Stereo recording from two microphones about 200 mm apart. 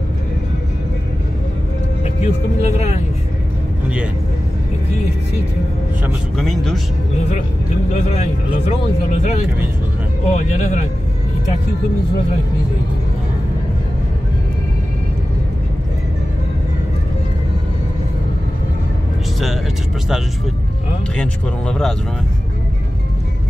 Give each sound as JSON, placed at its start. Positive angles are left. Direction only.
{"t": 2.2, "sound": "speech", "side_deg": 35}
{"t": 6.0, "sound": "speech", "side_deg": 0}
{"t": 7.9, "sound": "speech", "side_deg": 35}
{"t": 21.2, "sound": "speech", "side_deg": 5}